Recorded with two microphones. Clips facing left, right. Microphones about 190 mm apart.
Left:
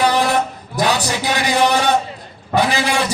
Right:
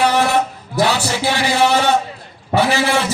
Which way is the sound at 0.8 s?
15° left (ahead or behind).